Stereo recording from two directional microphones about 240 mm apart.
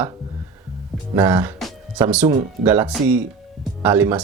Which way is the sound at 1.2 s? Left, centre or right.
Centre.